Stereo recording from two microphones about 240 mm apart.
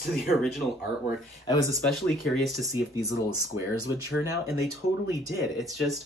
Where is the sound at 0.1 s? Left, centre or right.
Centre.